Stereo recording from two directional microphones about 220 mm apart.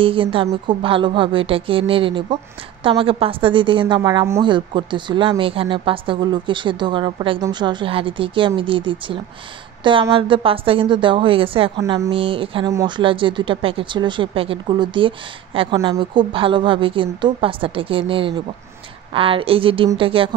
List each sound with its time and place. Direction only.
0.0 s speech: 25° right (ahead or behind)